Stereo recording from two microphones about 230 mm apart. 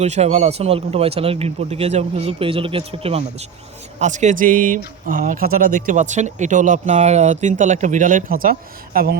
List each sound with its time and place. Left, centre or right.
0.0 s speech: right